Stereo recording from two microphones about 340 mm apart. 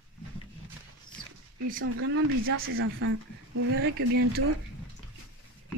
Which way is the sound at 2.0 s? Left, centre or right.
Right.